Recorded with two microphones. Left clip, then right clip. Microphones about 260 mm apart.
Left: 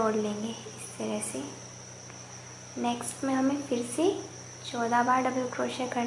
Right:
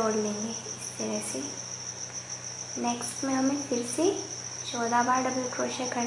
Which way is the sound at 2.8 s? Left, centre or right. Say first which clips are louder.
Even; centre.